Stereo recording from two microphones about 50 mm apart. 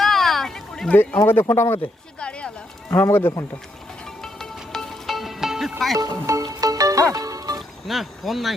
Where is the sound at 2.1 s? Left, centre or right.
Left.